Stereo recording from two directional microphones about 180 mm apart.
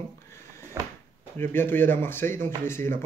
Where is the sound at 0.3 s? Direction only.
15° left (ahead or behind).